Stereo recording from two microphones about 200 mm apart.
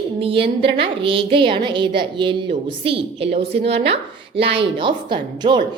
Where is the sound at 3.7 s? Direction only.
30° right (ahead or behind).